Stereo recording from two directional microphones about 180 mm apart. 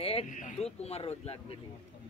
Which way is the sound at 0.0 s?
30° left (ahead or behind).